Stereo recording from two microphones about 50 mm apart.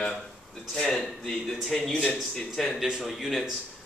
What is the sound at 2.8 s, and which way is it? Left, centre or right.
Speech, centre.